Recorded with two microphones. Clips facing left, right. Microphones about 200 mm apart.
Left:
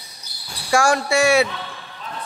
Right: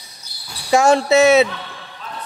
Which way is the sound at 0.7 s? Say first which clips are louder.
Right 5 dB; 20° right (ahead or behind).